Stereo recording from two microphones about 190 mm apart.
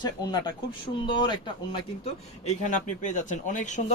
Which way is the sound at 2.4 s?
40° left (ahead or behind).